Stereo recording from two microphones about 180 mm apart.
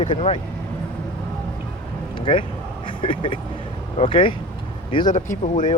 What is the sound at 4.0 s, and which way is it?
Speech, 30° left (ahead or behind).